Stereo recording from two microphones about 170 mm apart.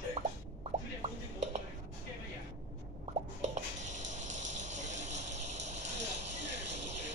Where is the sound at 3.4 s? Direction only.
45° right (ahead or behind).